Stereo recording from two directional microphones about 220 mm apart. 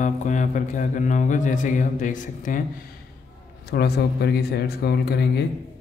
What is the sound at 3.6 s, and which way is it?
Speech, 45° left (ahead or behind).